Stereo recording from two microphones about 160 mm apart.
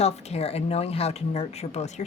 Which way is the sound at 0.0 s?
40° left (ahead or behind).